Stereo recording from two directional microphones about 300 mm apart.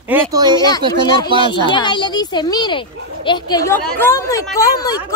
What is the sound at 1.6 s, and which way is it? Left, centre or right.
A child's voice, centre.